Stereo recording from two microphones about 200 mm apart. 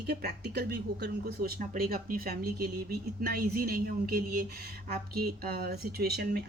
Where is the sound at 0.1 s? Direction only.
55° right (ahead or behind).